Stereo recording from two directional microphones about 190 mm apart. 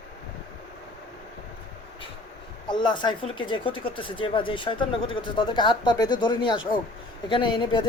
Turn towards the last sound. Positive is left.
turn(degrees=25)  # may be behind; listen again after turning